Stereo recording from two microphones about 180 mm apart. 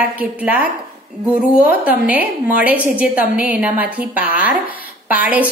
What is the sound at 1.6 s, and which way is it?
A woman's voice, 10° right (ahead or behind).